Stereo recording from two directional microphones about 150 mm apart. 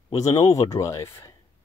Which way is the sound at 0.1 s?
25° left (ahead or behind).